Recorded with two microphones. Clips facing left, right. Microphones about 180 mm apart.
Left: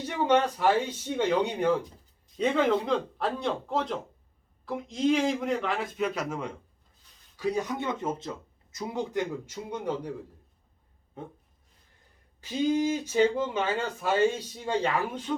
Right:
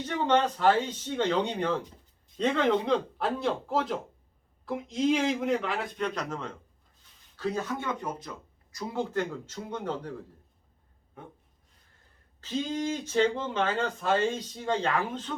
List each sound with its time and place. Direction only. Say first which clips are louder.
0.0 s speech: left 1 dB; 10° left (ahead or behind)
11.2 s a sound: left 5 dB; 25° left (ahead or behind)
12.4 s speech: left 5 dB; 10° left (ahead or behind)